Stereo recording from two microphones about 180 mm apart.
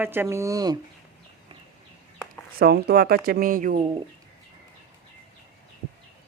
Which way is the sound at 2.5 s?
60° right (ahead or behind).